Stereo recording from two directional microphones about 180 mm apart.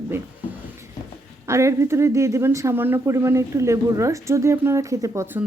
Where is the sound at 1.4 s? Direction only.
15° right (ahead or behind).